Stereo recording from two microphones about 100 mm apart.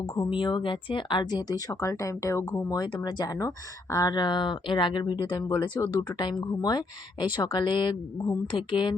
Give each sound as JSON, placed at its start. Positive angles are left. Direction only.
{"t": 0.3, "sound": "speech", "side_deg": 55}
{"t": 2.6, "sound": "speech", "side_deg": 45}